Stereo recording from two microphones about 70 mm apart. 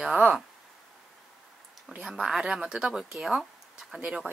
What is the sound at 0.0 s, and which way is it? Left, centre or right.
Speech, centre.